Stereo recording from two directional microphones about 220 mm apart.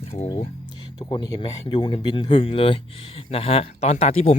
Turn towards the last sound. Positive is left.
turn(degrees=30)  # may be behind; listen again after turning